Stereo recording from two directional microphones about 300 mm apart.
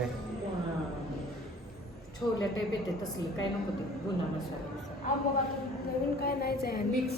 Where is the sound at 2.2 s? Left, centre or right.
Centre.